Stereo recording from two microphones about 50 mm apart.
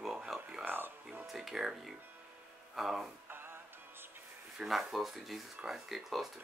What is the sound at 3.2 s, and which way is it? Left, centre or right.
Music, right.